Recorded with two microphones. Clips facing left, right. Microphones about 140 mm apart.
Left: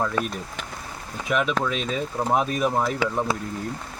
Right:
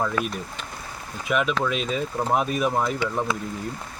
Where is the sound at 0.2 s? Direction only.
25° left (ahead or behind).